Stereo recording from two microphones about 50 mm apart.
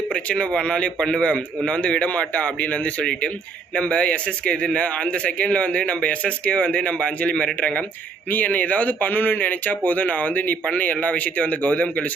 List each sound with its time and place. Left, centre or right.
0.1 s a man's voice: left